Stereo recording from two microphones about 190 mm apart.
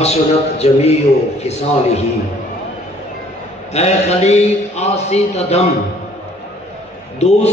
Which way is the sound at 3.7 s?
35° left (ahead or behind).